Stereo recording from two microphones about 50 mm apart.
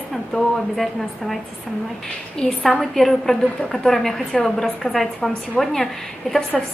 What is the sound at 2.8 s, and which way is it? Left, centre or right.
A woman's voice, centre.